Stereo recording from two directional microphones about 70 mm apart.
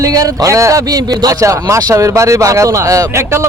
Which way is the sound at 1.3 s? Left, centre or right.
Right.